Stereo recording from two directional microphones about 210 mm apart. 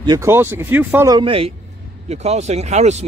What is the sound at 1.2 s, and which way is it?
Speech, 25° right (ahead or behind).